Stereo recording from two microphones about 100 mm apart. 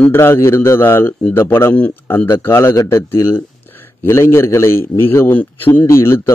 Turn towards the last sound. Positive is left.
turn(degrees=25)  # may be behind; listen again after turning